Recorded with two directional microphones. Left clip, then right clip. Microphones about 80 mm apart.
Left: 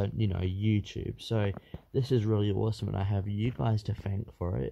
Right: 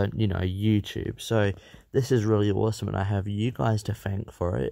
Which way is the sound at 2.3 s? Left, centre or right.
Right.